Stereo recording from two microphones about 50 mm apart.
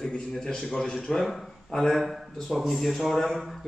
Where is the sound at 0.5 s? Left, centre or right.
Centre.